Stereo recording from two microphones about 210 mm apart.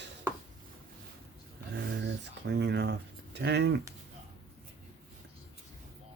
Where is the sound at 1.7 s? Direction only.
55° right (ahead or behind).